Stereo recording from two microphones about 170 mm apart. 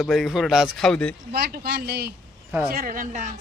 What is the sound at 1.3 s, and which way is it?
Speech, 65° right (ahead or behind).